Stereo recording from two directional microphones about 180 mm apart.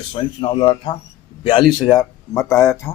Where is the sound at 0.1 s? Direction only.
30° left (ahead or behind).